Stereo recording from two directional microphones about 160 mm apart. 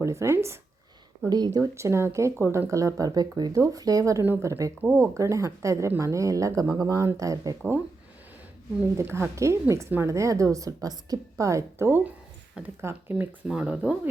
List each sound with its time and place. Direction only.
0.0 s speech: 20° right (ahead or behind)
9.0 s speech: 15° right (ahead or behind)